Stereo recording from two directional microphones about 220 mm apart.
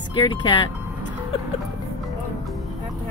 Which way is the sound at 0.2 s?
20° left (ahead or behind).